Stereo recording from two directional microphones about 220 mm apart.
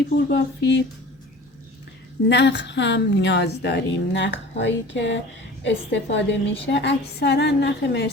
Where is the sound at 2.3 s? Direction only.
50° left (ahead or behind).